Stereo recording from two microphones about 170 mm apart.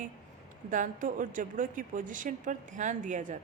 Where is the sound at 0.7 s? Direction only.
50° right (ahead or behind).